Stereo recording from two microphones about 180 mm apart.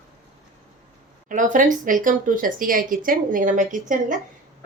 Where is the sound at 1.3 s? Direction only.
45° right (ahead or behind).